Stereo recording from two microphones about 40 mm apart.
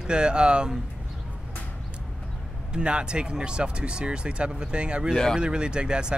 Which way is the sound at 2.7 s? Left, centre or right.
Right.